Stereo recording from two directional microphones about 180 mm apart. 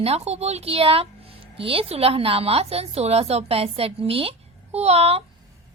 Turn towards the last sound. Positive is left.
turn(degrees=-35)  # may be behind; listen again after turning